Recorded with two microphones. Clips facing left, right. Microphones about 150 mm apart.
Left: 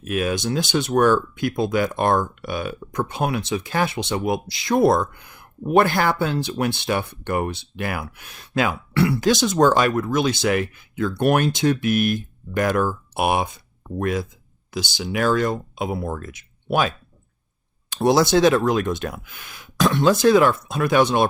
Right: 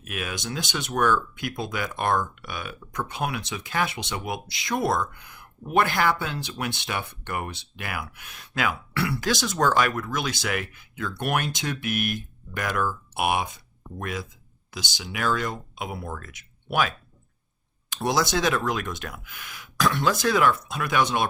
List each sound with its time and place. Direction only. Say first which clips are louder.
0.0 s speech: left 10 dB; 35° left (ahead or behind)